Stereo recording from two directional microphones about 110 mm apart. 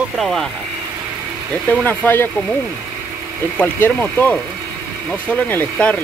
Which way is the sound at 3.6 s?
15° left (ahead or behind).